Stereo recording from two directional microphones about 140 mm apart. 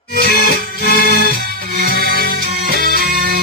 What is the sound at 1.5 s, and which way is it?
Music, 90° right.